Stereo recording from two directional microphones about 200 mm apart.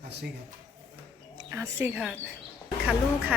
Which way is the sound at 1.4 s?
15° right (ahead or behind).